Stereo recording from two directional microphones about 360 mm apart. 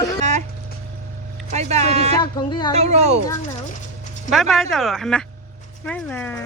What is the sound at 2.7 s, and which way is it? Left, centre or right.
Speech, centre.